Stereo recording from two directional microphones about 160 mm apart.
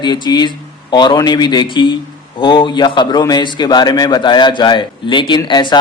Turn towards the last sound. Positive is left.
turn(degrees=30)  # may be behind; listen again after turning